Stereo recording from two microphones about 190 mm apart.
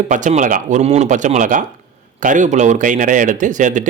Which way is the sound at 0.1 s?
40° right (ahead or behind).